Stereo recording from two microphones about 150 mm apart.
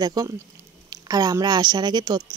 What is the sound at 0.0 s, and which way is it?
Speech, 25° right (ahead or behind).